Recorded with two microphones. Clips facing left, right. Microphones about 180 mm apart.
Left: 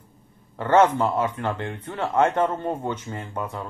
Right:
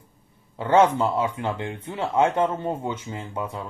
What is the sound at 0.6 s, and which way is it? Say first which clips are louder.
Speech: even; 15° right (ahead or behind).